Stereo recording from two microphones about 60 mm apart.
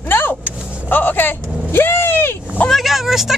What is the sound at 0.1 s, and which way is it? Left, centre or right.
Vehicle, left.